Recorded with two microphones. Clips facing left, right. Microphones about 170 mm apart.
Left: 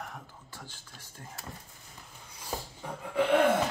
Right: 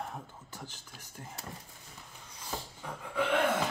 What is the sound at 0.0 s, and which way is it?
Speech, 25° right (ahead or behind).